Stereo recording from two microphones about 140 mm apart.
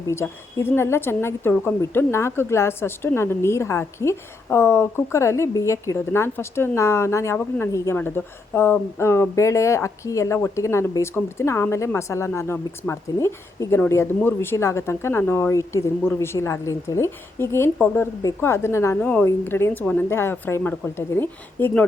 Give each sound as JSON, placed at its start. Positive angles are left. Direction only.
{"t": 0.1, "sound": "a woman's voice", "side_deg": 20}